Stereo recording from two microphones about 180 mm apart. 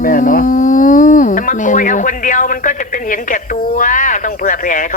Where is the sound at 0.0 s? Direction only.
50° left (ahead or behind).